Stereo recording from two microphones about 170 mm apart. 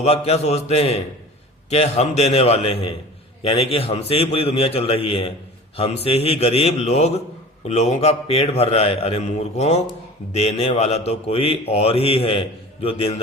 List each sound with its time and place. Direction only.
0.0 s speech: 40° left (ahead or behind)